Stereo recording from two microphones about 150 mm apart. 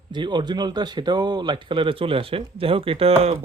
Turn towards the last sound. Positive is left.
turn(degrees=-40)  # may be behind; listen again after turning